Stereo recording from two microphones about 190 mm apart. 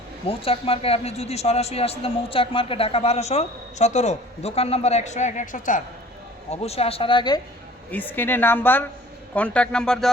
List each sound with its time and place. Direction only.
0.3 s a man's voice: 30° left (ahead or behind)
6.5 s a man's voice: 35° left (ahead or behind)
7.9 s a man's voice: 10° left (ahead or behind)